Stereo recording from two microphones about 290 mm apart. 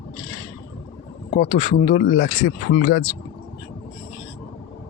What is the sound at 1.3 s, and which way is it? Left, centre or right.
Speech, left.